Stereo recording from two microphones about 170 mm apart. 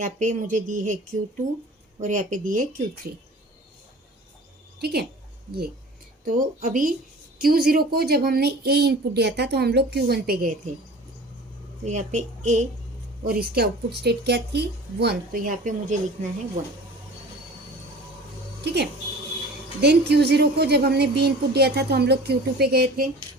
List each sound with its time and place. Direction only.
0.0 s speech: 50° right (ahead or behind)
2.0 s speech: 50° right (ahead or behind)
4.8 s a woman's voice: 70° right (ahead or behind)
6.2 s a woman's voice: 50° right (ahead or behind)
11.9 s speech: 45° right (ahead or behind)
13.2 s a woman's voice: 60° right (ahead or behind)
18.6 s a woman's voice: 75° right (ahead or behind)